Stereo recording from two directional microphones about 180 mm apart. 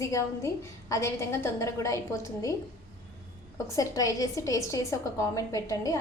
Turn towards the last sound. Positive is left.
turn(degrees=20)  # may be behind; listen again after turning